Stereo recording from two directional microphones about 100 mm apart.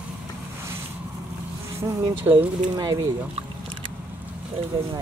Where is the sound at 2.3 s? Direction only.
30° right (ahead or behind).